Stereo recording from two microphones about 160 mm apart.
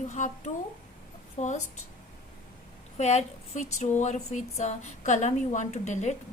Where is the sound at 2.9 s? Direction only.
45° left (ahead or behind).